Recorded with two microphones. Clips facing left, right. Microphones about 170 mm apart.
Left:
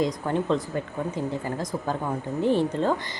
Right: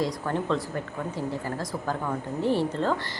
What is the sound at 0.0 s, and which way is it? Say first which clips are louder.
A woman's voice: left 3 dB; 20° left (ahead or behind).